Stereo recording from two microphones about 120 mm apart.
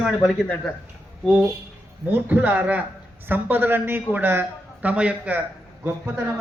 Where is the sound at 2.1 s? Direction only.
15° right (ahead or behind).